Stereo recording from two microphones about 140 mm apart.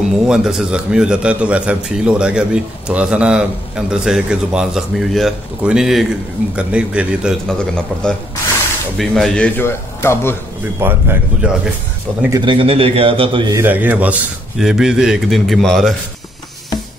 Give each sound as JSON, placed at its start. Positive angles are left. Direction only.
{"t": 0.3, "sound": "a man's voice", "side_deg": -5}
{"t": 7.4, "sound": "a man's voice", "side_deg": 5}
{"t": 9.7, "sound": "a man's voice", "side_deg": 15}
{"t": 10.8, "sound": "a man's voice", "side_deg": -15}
{"t": 12.3, "sound": "a man's voice", "side_deg": -35}
{"t": 13.5, "sound": "a man's voice", "side_deg": -15}